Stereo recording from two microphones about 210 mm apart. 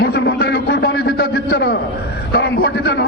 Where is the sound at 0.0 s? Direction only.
50° left (ahead or behind).